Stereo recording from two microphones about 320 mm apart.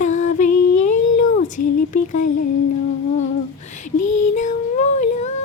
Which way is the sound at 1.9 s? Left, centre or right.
Left.